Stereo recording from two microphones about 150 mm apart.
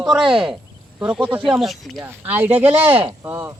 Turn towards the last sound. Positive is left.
turn(degrees=-20)  # may be behind; listen again after turning